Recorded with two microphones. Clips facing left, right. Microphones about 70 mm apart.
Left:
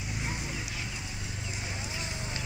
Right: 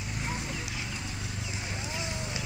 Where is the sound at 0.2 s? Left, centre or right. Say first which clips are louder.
Right 2 dB; centre.